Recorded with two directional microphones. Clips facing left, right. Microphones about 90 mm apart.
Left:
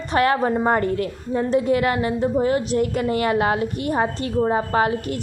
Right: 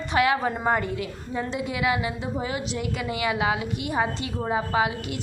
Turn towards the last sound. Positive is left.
turn(degrees=45)  # may be behind; listen again after turning